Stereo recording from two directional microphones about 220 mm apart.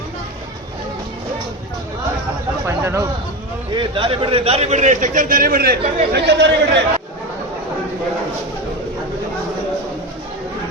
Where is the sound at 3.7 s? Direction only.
25° right (ahead or behind); by 6.8 s 50° right (ahead or behind).